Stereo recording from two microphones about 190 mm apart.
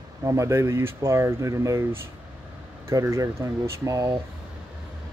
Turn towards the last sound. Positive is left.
turn(degrees=-15)  # may be behind; listen again after turning